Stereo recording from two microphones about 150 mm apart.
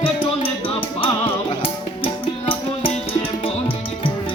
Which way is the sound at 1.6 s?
40° left (ahead or behind).